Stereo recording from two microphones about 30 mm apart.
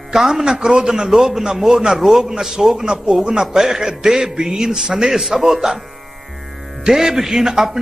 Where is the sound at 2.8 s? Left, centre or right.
Right.